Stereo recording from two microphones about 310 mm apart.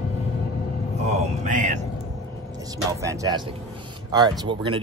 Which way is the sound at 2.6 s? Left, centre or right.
Centre.